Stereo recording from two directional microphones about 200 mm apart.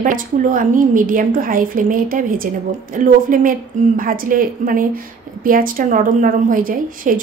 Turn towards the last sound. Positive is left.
turn(degrees=-45)  # may be behind; listen again after turning